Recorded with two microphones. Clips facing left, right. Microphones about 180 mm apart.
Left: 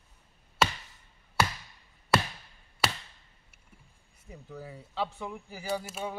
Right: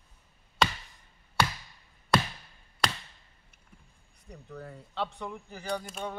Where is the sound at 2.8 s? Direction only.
5° left (ahead or behind).